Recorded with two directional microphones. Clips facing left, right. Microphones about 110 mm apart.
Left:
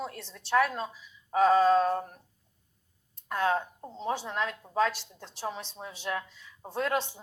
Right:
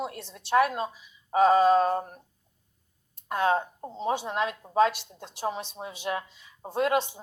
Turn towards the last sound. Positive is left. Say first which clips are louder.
# right 4 dB
turn(degrees=-15)  # may be behind; listen again after turning